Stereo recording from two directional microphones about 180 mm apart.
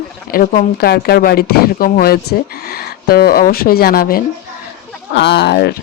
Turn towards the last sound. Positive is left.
turn(degrees=65)  # may be behind; listen again after turning